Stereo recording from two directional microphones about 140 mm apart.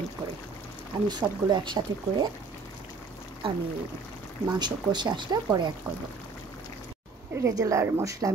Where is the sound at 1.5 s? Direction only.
35° right (ahead or behind).